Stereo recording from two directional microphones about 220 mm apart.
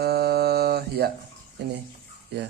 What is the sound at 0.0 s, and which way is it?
Mantra, 45° right (ahead or behind).